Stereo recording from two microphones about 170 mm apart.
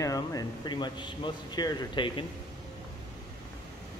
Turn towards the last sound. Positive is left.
turn(degrees=30)  # may be behind; listen again after turning